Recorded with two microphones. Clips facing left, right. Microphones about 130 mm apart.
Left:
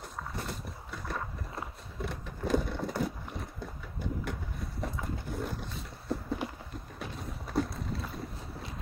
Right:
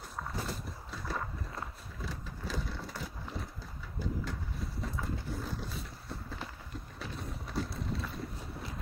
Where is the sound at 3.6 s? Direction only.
60° left (ahead or behind).